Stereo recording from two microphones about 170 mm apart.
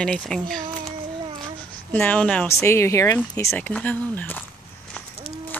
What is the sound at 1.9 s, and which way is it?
Speech, 10° left (ahead or behind).